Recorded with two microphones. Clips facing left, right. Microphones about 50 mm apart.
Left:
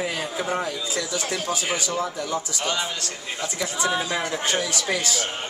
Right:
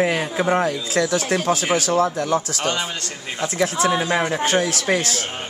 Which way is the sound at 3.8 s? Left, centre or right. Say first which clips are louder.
Right 3 dB; right.